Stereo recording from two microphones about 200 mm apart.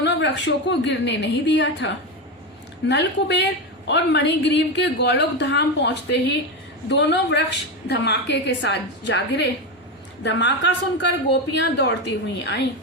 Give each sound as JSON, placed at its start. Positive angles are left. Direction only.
{"t": 0.0, "sound": "a woman's voice", "side_deg": 60}